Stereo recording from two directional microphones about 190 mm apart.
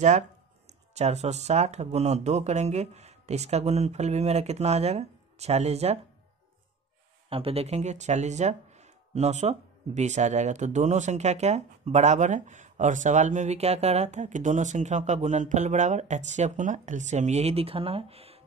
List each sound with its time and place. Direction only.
0.7 s speech: 35° right (ahead or behind)
7.2 s speech: 30° right (ahead or behind)